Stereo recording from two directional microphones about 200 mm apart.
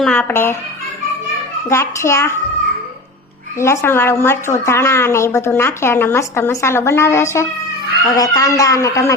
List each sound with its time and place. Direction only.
0.0 s a woman's voice: 5° left (ahead or behind)
1.7 s a woman's voice: 15° left (ahead or behind)
3.6 s a woman's voice: 15° left (ahead or behind)